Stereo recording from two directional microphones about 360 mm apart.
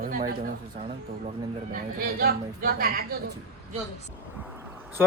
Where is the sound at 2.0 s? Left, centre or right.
Right.